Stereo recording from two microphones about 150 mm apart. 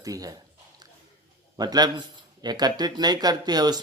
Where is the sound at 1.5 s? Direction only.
25° right (ahead or behind).